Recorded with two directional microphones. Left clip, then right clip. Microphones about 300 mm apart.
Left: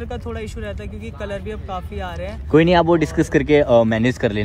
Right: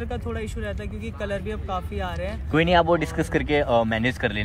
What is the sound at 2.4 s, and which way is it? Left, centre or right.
Speech, right.